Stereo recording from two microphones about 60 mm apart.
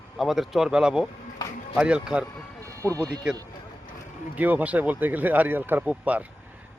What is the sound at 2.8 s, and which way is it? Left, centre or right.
Speech, right.